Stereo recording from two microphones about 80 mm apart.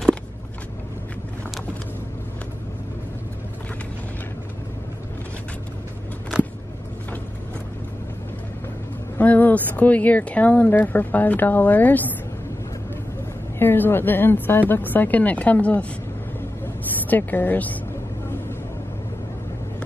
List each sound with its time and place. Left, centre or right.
9.2 s speech: centre
13.6 s speech: left
17.1 s speech: left